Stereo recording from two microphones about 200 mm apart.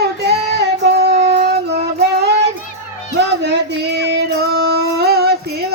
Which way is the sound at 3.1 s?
60° right (ahead or behind).